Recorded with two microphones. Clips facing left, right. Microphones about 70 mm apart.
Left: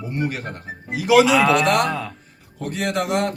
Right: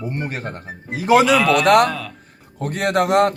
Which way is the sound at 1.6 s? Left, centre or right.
Right.